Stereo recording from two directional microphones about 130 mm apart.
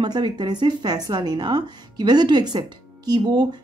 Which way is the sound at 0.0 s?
35° right (ahead or behind).